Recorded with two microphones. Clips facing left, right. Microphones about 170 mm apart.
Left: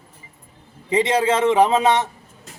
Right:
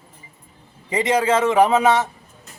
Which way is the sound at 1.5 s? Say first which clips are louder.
Even; 25° left (ahead or behind).